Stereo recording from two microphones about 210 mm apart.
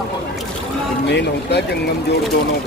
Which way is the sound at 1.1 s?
55° left (ahead or behind).